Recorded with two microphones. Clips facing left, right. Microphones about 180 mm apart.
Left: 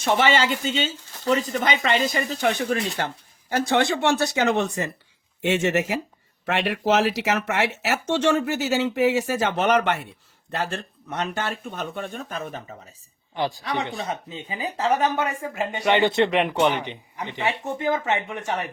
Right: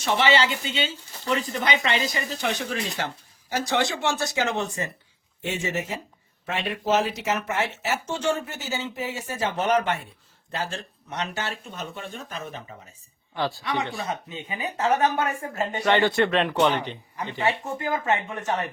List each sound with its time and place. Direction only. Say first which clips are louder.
0.0 s speech: left 1 dB; 50° left (ahead or behind); by 10.1 s 75° left (ahead or behind)
10.5 s speech: left 3 dB; 60° left (ahead or behind)
13.3 s a man's voice: left 1 dB; 15° left (ahead or behind)
14.1 s speech: left 1 dB; 30° left (ahead or behind)
15.5 s a man's voice: left 1 dB; 15° left (ahead or behind)